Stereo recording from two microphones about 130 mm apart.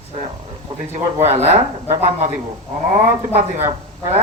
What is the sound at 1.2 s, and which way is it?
Speech, 55° right (ahead or behind).